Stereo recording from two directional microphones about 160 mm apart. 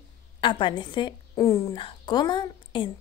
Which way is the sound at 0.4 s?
30° left (ahead or behind).